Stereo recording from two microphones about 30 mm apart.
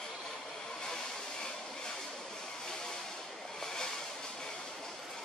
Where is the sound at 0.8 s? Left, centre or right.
Left.